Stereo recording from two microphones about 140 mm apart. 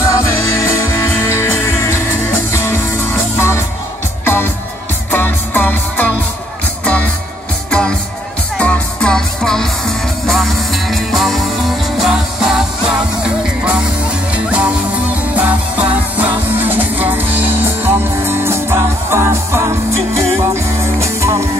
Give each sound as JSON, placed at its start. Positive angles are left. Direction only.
{"t": 0.0, "sound": "music", "side_deg": 20}
{"t": 8.5, "sound": "music", "side_deg": 10}
{"t": 14.3, "sound": "music", "side_deg": -10}